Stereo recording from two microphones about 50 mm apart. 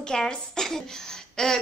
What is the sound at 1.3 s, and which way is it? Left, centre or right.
Throat clearing, centre.